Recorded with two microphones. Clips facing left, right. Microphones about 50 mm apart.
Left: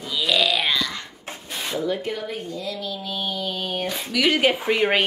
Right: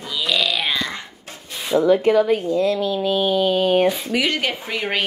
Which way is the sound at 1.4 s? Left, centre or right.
Centre.